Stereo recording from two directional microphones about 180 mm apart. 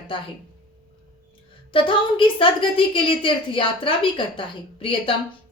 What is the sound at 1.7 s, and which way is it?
A woman's voice, 30° left (ahead or behind).